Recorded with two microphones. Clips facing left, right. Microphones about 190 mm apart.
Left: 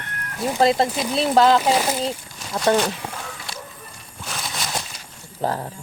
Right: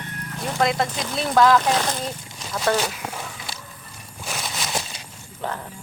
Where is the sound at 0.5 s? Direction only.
30° left (ahead or behind).